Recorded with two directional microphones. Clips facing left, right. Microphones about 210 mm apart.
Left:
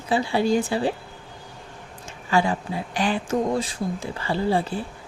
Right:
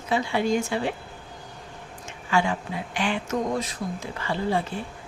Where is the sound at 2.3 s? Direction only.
35° left (ahead or behind).